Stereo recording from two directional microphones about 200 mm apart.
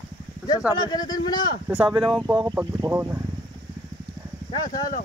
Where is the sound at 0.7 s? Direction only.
20° left (ahead or behind).